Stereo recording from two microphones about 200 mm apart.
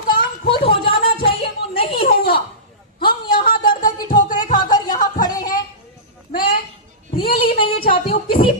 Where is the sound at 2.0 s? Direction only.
50° left (ahead or behind).